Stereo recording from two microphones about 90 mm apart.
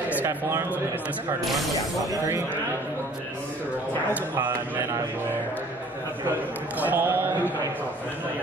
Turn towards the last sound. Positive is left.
turn(degrees=-20)  # may be behind; listen again after turning